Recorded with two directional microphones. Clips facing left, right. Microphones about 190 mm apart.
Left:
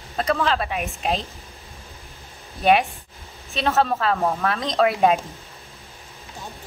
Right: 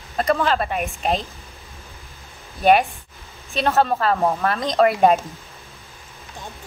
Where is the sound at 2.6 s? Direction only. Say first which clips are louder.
Right 2 dB; centre (ahead or behind).